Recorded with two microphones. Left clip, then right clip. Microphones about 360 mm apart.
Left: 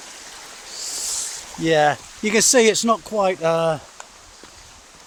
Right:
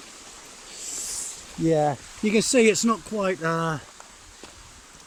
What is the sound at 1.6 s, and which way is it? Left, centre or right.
Speech, left.